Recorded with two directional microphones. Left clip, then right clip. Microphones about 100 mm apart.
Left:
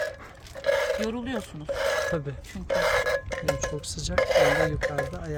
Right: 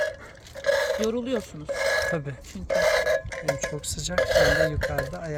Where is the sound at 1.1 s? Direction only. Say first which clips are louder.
Right 5 dB; 50° left (ahead or behind).